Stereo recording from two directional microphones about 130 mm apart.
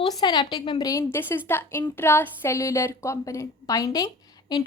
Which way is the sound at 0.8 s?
20° left (ahead or behind).